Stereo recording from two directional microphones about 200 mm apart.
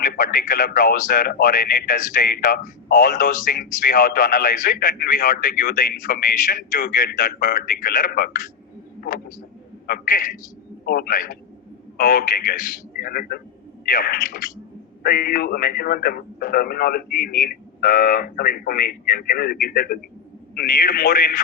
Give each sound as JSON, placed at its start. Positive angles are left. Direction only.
{"t": 0.0, "sound": "speech", "side_deg": 45}
{"t": 9.0, "sound": "a sound", "side_deg": 45}
{"t": 9.8, "sound": "a man's voice", "side_deg": 45}